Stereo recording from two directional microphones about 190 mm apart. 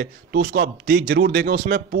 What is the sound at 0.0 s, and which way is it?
A man's voice, 55° right (ahead or behind).